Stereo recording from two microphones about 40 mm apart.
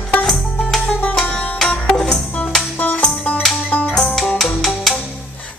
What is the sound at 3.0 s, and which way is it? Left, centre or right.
Music, left.